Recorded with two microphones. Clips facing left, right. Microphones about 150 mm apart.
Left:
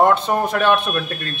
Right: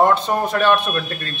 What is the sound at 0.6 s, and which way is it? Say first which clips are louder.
Speech: right 2 dB; 15° left (ahead or behind).